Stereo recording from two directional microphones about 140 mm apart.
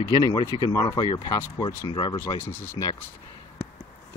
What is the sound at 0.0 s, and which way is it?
Speech, 30° left (ahead or behind).